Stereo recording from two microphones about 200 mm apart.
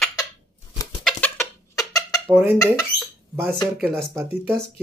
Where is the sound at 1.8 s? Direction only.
15° left (ahead or behind).